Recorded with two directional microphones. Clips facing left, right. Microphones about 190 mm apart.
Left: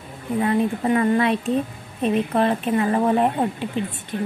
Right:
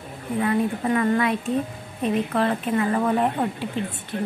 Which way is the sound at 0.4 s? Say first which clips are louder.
Left 2 dB; 25° left (ahead or behind).